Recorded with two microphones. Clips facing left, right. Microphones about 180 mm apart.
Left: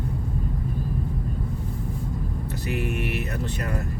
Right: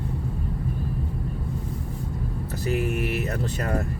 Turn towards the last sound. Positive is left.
turn(degrees=-40)  # may be behind; listen again after turning